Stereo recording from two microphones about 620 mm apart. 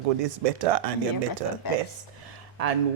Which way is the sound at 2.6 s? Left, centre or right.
Right.